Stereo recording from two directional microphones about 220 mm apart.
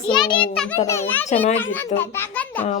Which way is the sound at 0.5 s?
10° left (ahead or behind).